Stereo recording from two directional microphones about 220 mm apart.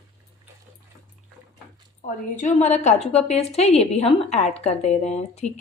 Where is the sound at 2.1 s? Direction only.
35° left (ahead or behind).